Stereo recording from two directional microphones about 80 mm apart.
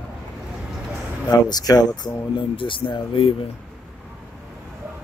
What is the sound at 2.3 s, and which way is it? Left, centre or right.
Speech, left.